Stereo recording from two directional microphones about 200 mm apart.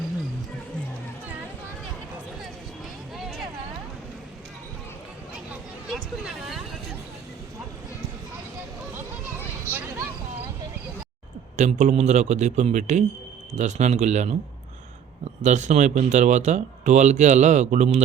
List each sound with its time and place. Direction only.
5.9 s speech: centre (ahead or behind)
9.6 s vehicle: 10° right (ahead or behind)
11.5 s speech: 35° right (ahead or behind)
15.4 s speech: 35° right (ahead or behind)